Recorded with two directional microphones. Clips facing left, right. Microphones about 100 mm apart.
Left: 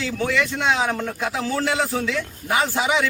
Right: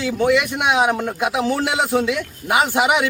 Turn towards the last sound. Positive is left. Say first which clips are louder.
# right 4 dB
turn(degrees=-15)  # may be behind; listen again after turning